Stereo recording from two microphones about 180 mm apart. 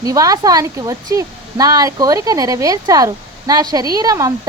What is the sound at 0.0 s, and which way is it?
Speech, 20° right (ahead or behind).